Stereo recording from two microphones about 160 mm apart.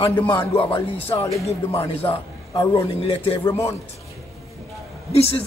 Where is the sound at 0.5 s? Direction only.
35° left (ahead or behind).